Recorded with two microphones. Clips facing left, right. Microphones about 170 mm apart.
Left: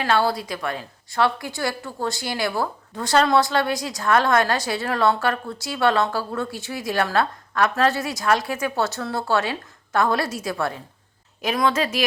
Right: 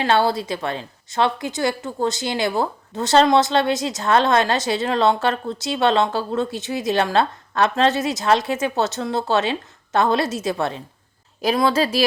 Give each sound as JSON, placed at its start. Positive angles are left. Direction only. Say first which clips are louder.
{"t": 0.0, "sound": "a woman's voice", "louder": "right 3 dB", "side_deg": -25}